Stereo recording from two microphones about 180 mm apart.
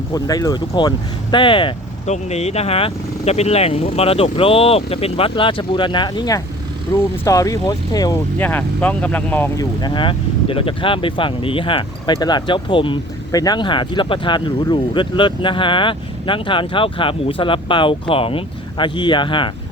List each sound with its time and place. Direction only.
0.1 s speech: 20° left (ahead or behind)
8.4 s speech: 10° left (ahead or behind)
9.8 s speech: 25° left (ahead or behind)